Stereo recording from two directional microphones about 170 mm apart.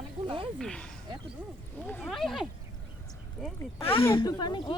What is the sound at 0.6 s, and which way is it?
Speech, 5° left (ahead or behind).